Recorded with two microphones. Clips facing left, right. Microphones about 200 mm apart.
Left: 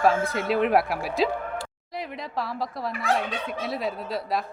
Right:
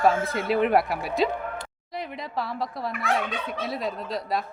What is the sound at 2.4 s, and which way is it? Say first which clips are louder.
Speech: even; centre (ahead or behind).